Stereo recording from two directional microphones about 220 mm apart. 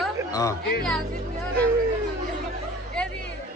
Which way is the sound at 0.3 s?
15° left (ahead or behind).